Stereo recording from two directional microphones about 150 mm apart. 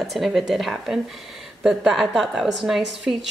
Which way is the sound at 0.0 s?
Centre (ahead or behind).